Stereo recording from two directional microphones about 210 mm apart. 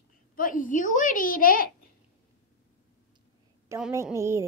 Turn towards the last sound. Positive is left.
turn(degrees=-10)  # may be behind; listen again after turning